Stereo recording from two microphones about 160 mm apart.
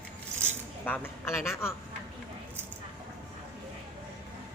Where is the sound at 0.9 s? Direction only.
15° left (ahead or behind).